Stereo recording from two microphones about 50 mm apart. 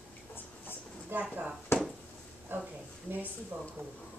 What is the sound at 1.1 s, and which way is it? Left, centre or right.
Speech, right.